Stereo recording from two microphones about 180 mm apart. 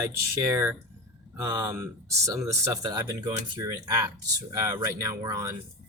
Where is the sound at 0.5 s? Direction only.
15° right (ahead or behind).